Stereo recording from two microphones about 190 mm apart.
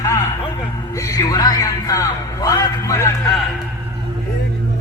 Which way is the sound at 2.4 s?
15° left (ahead or behind).